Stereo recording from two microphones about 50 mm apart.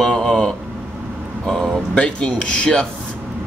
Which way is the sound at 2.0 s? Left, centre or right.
Left.